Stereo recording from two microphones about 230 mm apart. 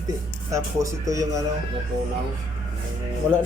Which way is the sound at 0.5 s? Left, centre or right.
Centre.